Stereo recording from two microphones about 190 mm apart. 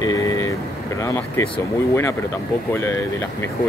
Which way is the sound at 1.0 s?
15° left (ahead or behind).